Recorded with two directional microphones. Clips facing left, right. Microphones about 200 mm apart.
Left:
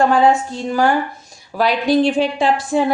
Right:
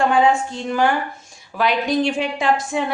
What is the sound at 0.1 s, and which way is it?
A woman's voice, 40° left (ahead or behind).